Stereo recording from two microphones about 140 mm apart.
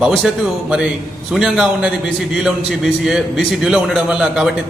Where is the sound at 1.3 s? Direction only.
5° right (ahead or behind).